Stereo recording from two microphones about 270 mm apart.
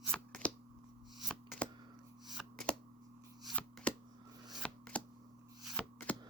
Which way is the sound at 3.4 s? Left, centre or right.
Centre.